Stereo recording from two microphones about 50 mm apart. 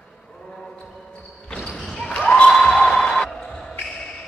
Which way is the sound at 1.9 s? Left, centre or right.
Centre.